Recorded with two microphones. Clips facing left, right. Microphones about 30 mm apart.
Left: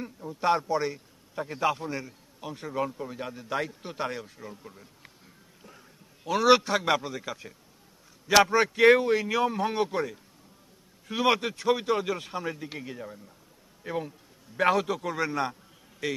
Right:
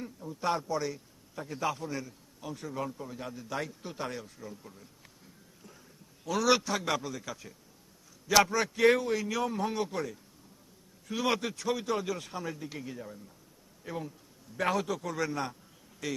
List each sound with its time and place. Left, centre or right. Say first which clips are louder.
0.0 s a man's voice: left 5 dB; left
6.2 s a man's voice: left 6 dB; left